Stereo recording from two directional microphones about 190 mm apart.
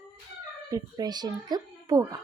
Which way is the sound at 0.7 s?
20° right (ahead or behind).